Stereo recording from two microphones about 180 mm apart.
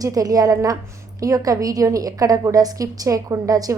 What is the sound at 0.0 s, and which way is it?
A woman's voice, 20° right (ahead or behind).